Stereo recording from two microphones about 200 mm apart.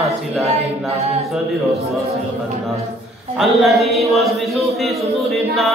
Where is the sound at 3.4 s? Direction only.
Centre (ahead or behind).